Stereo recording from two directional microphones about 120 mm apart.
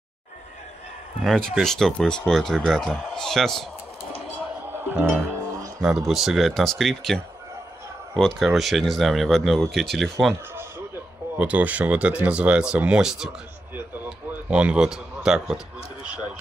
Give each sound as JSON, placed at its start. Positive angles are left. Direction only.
{"t": 1.2, "sound": "speech", "side_deg": 5}
{"t": 4.6, "sound": "music", "side_deg": -20}
{"t": 5.8, "sound": "speech", "side_deg": -5}
{"t": 8.4, "sound": "speech", "side_deg": 0}
{"t": 10.3, "sound": "a man's voice", "side_deg": -20}